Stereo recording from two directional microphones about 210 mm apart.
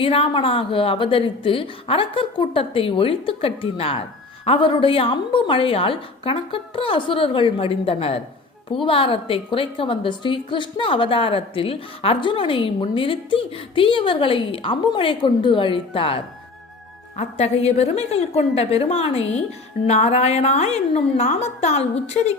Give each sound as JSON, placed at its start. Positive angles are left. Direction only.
{"t": 0.0, "sound": "a woman's voice", "side_deg": 25}